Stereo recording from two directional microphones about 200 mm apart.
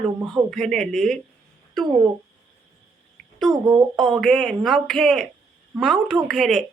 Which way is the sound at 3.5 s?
20° right (ahead or behind).